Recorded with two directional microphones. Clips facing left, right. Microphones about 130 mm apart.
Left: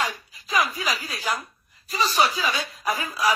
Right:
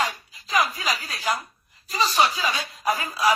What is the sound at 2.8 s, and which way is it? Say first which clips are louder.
Speech: right 3 dB; 40° right (ahead or behind).